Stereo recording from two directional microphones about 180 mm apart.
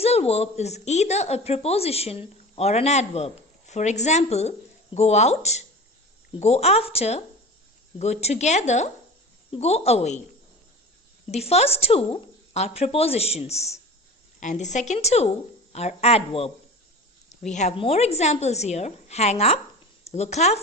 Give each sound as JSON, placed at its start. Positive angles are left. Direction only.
{"t": 0.0, "sound": "a woman's voice", "side_deg": 35}
{"t": 11.3, "sound": "a woman's voice", "side_deg": 35}
{"t": 17.5, "sound": "a woman's voice", "side_deg": 40}